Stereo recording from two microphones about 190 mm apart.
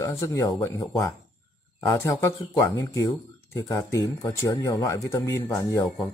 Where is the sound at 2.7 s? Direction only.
15° left (ahead or behind).